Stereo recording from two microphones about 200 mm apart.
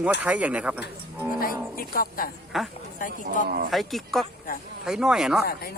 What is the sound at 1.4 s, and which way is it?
Speech, 45° left (ahead or behind).